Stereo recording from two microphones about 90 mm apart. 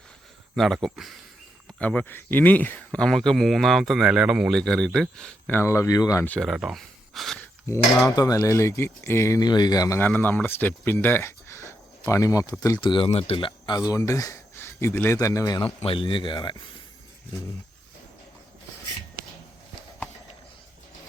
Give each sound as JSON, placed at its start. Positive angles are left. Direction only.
{"t": 0.5, "sound": "speech", "side_deg": 0}
{"t": 1.8, "sound": "speech", "side_deg": 15}
{"t": 3.0, "sound": "speech", "side_deg": 5}
{"t": 5.5, "sound": "speech", "side_deg": 25}
{"t": 6.4, "sound": "speech", "side_deg": -5}
{"t": 7.7, "sound": "speech", "side_deg": 35}
{"t": 9.4, "sound": "speech", "side_deg": 50}
{"t": 10.0, "sound": "speech", "side_deg": 20}
{"t": 12.8, "sound": "speech", "side_deg": 75}
{"t": 14.1, "sound": "speech", "side_deg": 40}
{"t": 15.6, "sound": "speech", "side_deg": 90}